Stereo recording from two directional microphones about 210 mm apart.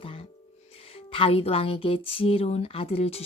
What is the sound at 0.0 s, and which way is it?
Music, 25° left (ahead or behind).